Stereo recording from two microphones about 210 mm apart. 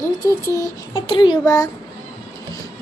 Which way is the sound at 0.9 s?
25° left (ahead or behind).